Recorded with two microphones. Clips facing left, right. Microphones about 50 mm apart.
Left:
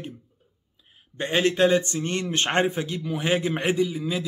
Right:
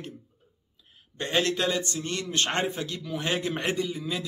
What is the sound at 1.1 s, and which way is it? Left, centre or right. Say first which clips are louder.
Speech: left 3 dB; centre.